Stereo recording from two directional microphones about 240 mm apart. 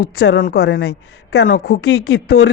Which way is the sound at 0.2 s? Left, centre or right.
Left.